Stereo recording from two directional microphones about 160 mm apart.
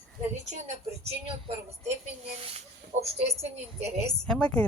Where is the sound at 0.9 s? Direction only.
40° right (ahead or behind).